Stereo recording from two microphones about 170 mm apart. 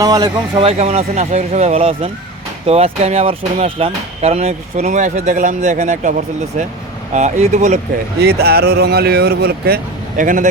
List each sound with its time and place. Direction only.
0.0 s speech: 25° right (ahead or behind)
0.6 s speech: 40° right (ahead or behind)
8.2 s speech: 70° right (ahead or behind); by 10.5 s 50° right (ahead or behind)